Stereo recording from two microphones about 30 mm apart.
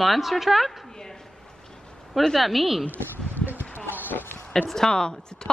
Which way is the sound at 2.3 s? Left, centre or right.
Centre.